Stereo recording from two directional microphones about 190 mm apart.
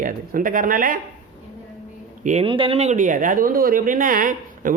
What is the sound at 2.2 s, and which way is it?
Speech, 40° right (ahead or behind).